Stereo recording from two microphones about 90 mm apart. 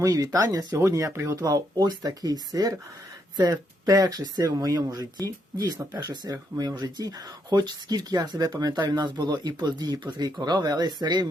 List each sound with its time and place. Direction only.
0.0 s speech: 45° right (ahead or behind)
0.7 s speech: 35° right (ahead or behind)
1.4 s speech: 45° right (ahead or behind)